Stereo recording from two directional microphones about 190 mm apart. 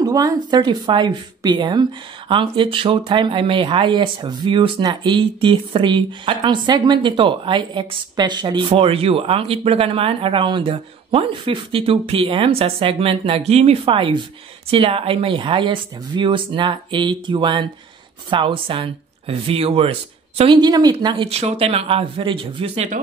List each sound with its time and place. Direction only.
0.0 s a woman's voice: 20° right (ahead or behind)